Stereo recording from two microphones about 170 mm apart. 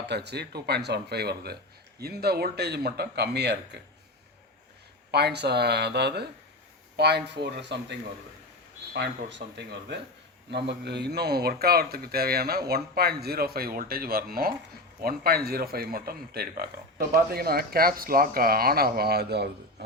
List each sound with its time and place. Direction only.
0.1 s speech: 80° right
5.1 s speech: 75° right (ahead or behind)